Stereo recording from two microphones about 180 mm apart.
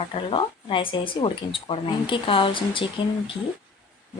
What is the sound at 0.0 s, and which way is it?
Speech, 30° left (ahead or behind).